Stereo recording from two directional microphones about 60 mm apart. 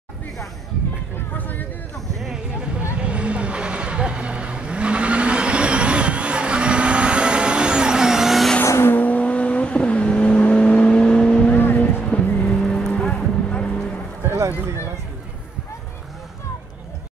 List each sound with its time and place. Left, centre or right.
1.4 s hubbub: left
2.8 s vehicle: right; by 8.5 s centre
8.6 s vehicle: left
8.9 s vehicle: left
11.5 s vehicle: left